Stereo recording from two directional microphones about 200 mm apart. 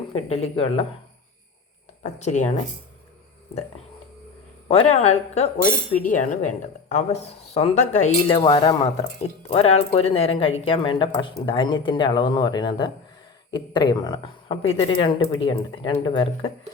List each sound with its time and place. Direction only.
0.1 s speech: 30° left (ahead or behind)
2.0 s a woman's voice: 35° left (ahead or behind)
4.7 s a woman's voice: 35° left (ahead or behind)